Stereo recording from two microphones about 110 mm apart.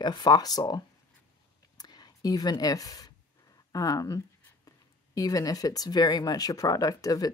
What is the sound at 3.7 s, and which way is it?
Speech, 35° left (ahead or behind).